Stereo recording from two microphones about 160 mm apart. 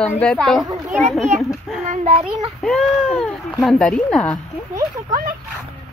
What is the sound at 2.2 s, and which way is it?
A child's voice, centre (ahead or behind).